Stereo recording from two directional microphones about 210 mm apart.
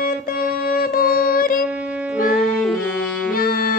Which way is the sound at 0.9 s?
45° left (ahead or behind).